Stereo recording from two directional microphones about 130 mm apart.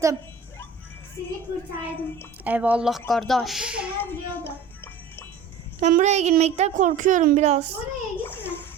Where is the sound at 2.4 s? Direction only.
10° right (ahead or behind).